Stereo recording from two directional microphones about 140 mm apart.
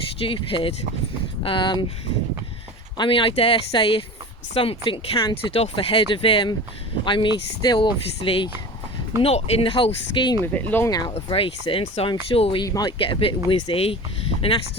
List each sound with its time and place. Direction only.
0.2 s speech: 40° left (ahead or behind)
3.0 s speech: 35° left (ahead or behind)
10.4 s speech: 15° left (ahead or behind)
10.8 s speech: 25° left (ahead or behind)
11.1 s speech: 40° left (ahead or behind)
12.6 s speech: 25° left (ahead or behind)
13.0 s speech: 40° left (ahead or behind)